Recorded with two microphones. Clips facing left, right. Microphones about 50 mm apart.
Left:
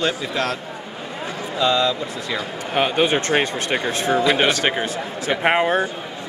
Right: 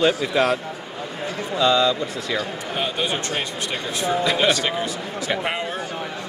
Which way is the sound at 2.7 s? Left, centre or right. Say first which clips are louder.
Left 7 dB; left.